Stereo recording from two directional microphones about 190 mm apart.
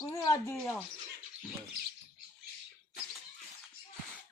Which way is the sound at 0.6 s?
5° left (ahead or behind).